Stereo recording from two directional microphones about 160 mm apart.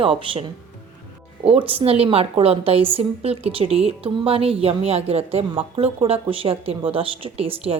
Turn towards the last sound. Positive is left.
turn(degrees=-35)  # may be behind; listen again after turning